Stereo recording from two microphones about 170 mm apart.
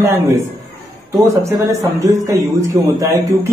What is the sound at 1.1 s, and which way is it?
Speech, 20° right (ahead or behind).